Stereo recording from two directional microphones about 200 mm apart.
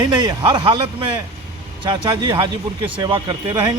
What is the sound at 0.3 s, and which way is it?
Speech, 20° right (ahead or behind).